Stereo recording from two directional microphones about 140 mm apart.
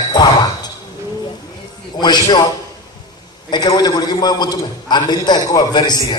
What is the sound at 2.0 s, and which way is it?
Speech, 30° left (ahead or behind).